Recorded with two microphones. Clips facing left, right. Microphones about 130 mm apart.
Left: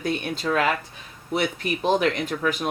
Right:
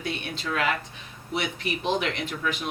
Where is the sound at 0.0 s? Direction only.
40° left (ahead or behind).